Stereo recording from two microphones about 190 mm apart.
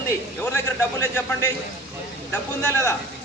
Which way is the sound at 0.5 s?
15° left (ahead or behind).